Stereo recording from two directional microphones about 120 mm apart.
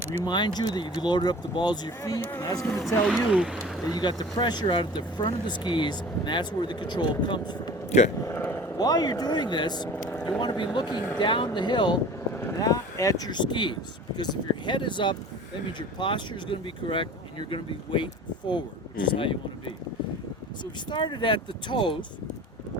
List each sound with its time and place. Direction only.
0.3 s speech: 40° left (ahead or behind)
2.6 s speech: centre (ahead or behind)
3.9 s speech: 35° left (ahead or behind)
7.9 s speech: 70° left (ahead or behind)
8.2 s a sound: 20° left (ahead or behind)
8.8 s speech: 30° left (ahead or behind)
12.3 s vehicle: 20° left (ahead or behind)
12.5 s speech: 30° left (ahead or behind); by 19.7 s 45° left (ahead or behind)
20.9 s speech: 40° left (ahead or behind)